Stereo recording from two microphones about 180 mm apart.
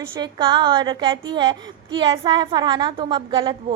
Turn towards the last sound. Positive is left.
turn(degrees=-25)  # may be behind; listen again after turning